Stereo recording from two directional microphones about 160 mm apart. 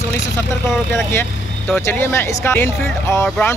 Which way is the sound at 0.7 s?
15° left (ahead or behind).